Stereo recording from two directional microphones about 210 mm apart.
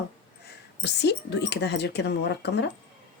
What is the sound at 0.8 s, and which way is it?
A woman's voice, 55° left (ahead or behind).